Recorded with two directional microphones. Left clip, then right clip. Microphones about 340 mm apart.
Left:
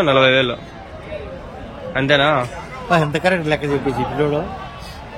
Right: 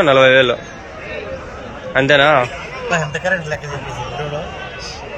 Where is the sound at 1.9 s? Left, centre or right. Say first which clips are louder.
Right 4 dB; centre.